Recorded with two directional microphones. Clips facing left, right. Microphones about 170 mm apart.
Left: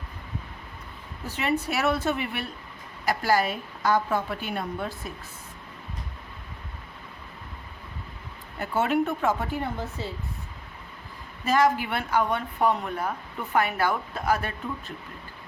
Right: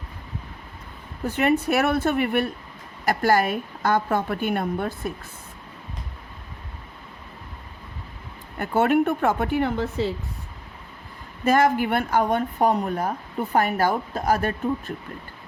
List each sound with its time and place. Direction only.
1.3 s speech: 55° right (ahead or behind)
8.5 s speech: 55° right (ahead or behind); by 10.1 s 75° right (ahead or behind)
11.4 s speech: 55° right (ahead or behind)